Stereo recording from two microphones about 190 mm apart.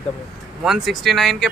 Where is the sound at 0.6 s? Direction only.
Centre (ahead or behind).